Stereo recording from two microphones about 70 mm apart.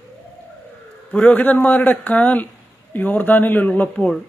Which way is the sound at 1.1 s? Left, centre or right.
Centre.